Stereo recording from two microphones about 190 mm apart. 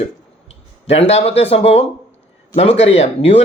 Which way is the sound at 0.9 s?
35° left (ahead or behind).